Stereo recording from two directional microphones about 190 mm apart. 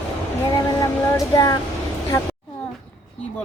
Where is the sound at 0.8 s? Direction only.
15° left (ahead or behind).